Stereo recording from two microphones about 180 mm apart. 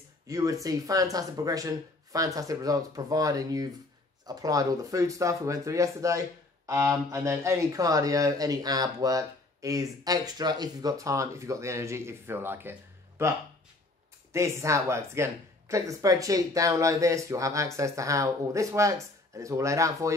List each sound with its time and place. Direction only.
0.3 s speech: 20° right (ahead or behind)